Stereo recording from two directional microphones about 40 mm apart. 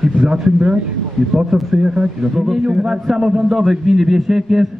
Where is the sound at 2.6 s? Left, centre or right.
Centre.